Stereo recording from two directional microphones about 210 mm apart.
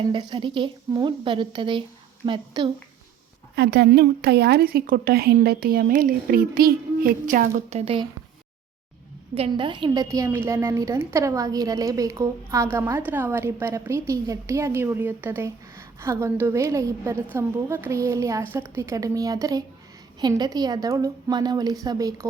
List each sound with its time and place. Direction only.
0.1 s a woman's voice: 20° right (ahead or behind)
3.5 s a woman's voice: 50° right (ahead or behind); by 8.0 s 30° right (ahead or behind)
9.3 s a woman's voice: 25° right (ahead or behind)